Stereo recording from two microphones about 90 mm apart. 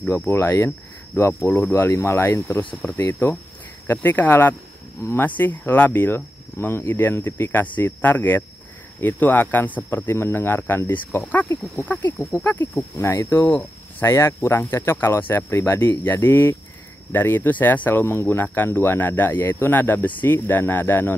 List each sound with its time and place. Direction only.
0.2 s speech: 25° left (ahead or behind)
12.9 s speech: 35° left (ahead or behind)
13.5 s speech: 20° left (ahead or behind)